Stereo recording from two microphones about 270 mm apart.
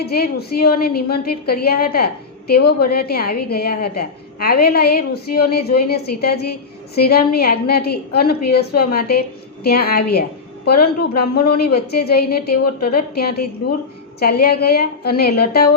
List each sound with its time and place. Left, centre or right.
0.0 s a woman's voice: left